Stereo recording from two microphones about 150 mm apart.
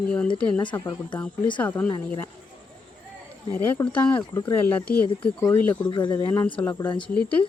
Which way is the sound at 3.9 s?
10° left (ahead or behind).